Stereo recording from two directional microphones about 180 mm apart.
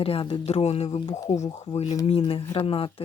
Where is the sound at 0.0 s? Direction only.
30° left (ahead or behind).